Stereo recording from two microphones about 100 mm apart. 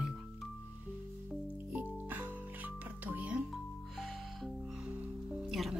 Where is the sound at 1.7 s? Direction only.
20° right (ahead or behind).